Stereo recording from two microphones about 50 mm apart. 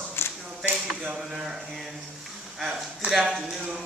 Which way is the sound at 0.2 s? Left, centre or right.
Left.